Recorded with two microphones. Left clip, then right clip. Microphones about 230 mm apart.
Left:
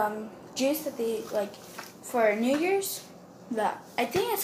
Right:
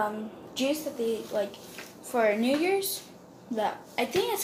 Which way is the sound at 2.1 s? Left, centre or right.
Centre.